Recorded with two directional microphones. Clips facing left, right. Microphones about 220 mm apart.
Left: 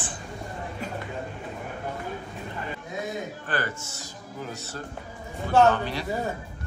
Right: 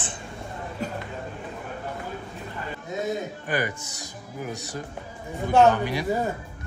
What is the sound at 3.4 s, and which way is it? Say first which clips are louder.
Speech: right 4 dB; 15° right (ahead or behind).